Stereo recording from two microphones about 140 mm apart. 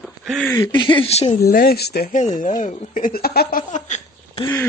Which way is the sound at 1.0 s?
45° left (ahead or behind).